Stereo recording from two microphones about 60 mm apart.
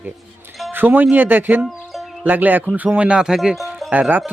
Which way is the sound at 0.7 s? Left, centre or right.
Right.